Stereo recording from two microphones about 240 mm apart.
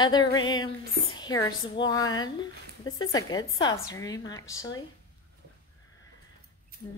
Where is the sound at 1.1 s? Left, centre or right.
Centre.